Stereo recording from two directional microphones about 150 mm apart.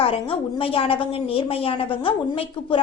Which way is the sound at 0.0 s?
40° left (ahead or behind).